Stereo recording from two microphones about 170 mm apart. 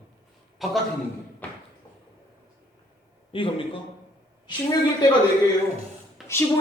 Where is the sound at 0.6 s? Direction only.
Centre (ahead or behind).